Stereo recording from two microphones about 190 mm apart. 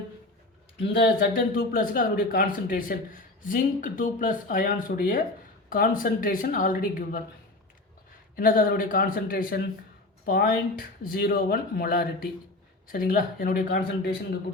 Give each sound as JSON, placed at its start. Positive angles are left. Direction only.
{"t": 1.3, "sound": "speech", "side_deg": 45}
{"t": 8.4, "sound": "speech", "side_deg": 50}